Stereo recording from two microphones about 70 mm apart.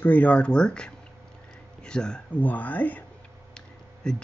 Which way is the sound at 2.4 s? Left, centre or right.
Left.